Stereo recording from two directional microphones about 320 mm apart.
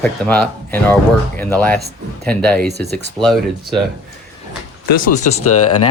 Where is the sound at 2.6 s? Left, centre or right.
Right.